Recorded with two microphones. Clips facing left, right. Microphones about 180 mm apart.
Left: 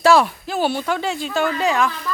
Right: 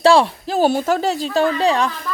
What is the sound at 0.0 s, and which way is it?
Speech, 30° right (ahead or behind).